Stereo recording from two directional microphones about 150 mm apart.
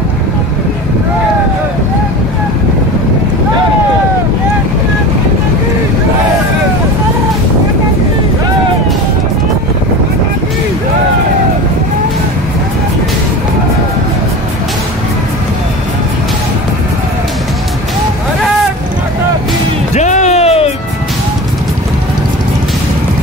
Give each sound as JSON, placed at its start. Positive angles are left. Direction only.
{"t": 19.9, "sound": "music", "side_deg": 50}